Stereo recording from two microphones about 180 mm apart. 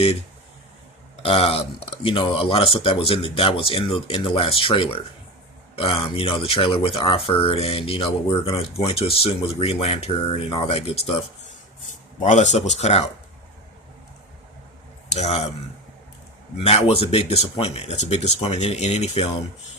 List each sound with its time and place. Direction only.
1.2 s speech: 30° left (ahead or behind)
12.2 s speech: 40° left (ahead or behind)
15.1 s speech: 35° left (ahead or behind)
16.6 s speech: 35° left (ahead or behind)